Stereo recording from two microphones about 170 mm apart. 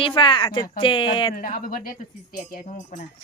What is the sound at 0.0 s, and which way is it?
Speech, 30° left (ahead or behind).